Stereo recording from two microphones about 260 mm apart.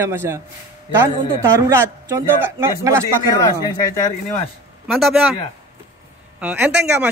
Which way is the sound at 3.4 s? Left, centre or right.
Centre.